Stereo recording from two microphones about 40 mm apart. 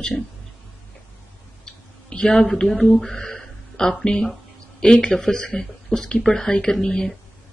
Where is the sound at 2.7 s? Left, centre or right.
Centre.